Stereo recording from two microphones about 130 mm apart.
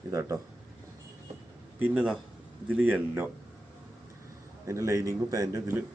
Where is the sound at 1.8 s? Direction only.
10° right (ahead or behind).